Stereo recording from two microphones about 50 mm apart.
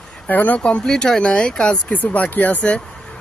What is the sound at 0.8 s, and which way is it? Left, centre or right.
Speech, centre.